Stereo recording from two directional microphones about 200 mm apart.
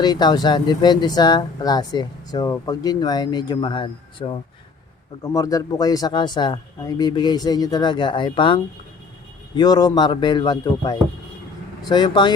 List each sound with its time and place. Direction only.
0.0 s speech: 20° left (ahead or behind)